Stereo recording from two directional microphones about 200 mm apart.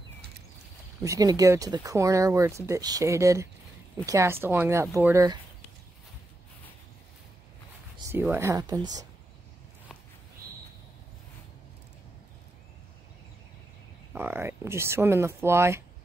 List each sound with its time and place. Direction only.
1.0 s speech: 15° right (ahead or behind)
8.1 s speech: 15° right (ahead or behind)
14.1 s speech: 10° right (ahead or behind)